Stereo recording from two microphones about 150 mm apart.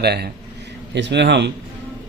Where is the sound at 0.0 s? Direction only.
90° right.